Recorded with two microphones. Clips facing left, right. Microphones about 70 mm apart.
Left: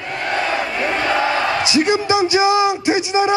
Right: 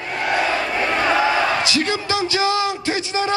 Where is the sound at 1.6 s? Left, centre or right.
Centre.